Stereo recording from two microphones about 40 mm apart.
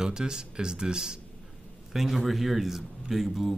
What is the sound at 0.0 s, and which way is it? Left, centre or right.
Speech, centre.